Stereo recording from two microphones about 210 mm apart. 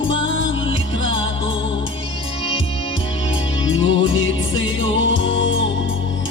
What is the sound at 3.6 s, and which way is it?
Music, 65° left (ahead or behind).